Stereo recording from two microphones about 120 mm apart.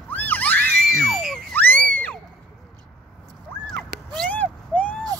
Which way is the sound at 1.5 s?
15° left (ahead or behind).